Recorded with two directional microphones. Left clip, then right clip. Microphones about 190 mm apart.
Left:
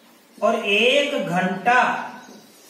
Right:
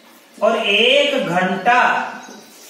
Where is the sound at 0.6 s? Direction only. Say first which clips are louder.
Right 4 dB; 15° right (ahead or behind).